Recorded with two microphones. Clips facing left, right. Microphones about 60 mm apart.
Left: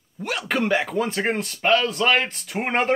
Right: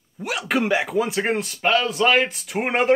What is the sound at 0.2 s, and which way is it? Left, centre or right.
A man's voice, centre.